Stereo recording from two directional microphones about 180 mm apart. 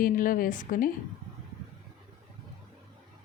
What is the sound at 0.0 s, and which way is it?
Speech, 50° left (ahead or behind).